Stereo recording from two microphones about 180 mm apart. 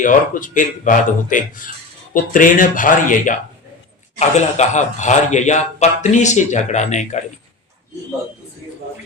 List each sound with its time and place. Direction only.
0.0 s speech: 45° left (ahead or behind)
4.4 s a man's voice: 40° left (ahead or behind)